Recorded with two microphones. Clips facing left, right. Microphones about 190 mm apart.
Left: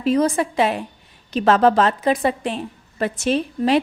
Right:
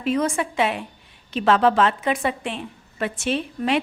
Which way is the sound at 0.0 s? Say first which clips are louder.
Left 4 dB; 35° left (ahead or behind).